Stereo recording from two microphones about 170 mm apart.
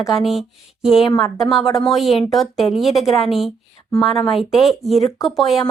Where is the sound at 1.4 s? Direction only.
Centre (ahead or behind).